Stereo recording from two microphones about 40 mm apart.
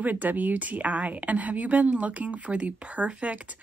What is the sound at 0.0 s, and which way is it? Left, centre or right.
Speech, right.